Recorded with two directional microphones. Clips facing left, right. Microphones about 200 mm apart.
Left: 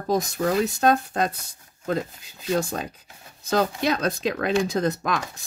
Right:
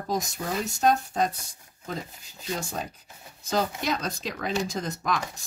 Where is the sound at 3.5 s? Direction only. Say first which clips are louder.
Left 5 dB; 60° left (ahead or behind).